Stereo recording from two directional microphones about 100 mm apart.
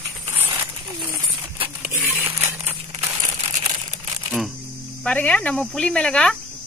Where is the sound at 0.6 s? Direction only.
25° right (ahead or behind).